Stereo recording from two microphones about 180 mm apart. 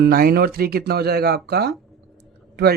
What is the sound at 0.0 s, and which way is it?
Speech, 55° right (ahead or behind).